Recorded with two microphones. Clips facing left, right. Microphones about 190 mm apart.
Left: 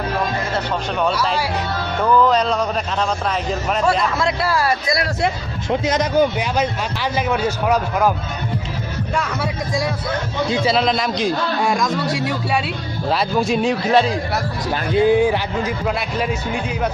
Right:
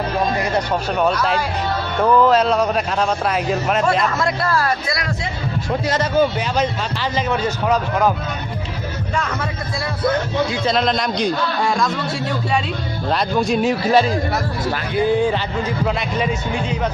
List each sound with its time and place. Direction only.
1.1 s a man's voice: 5° left (ahead or behind)
2.2 s a man's voice: 5° right (ahead or behind)
4.5 s a man's voice: 10° left (ahead or behind)
9.1 s a man's voice: 5° left (ahead or behind)
10.7 s a man's voice: 5° left (ahead or behind)
14.7 s a man's voice: 15° left (ahead or behind)